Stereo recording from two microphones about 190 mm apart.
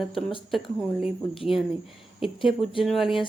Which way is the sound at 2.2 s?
Centre (ahead or behind).